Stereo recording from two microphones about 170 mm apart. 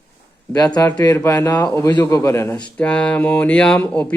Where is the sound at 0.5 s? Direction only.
25° left (ahead or behind).